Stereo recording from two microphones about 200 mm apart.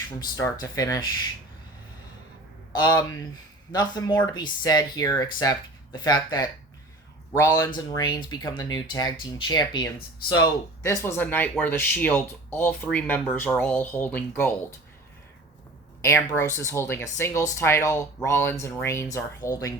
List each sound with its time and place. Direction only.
0.2 s speech: 15° left (ahead or behind)
2.7 s speech: 20° left (ahead or behind)
16.0 s speech: 15° left (ahead or behind)